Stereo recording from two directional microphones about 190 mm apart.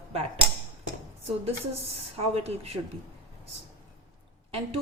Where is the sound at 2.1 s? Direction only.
30° right (ahead or behind).